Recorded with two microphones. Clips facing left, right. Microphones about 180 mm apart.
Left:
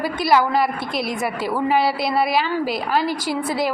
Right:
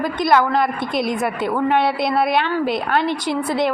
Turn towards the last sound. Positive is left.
turn(degrees=5)  # may be behind; listen again after turning